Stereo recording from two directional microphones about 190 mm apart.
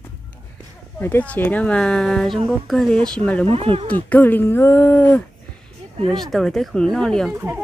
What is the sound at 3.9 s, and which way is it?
Speech, 10° left (ahead or behind).